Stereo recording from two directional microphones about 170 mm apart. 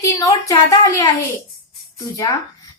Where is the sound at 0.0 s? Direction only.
20° left (ahead or behind).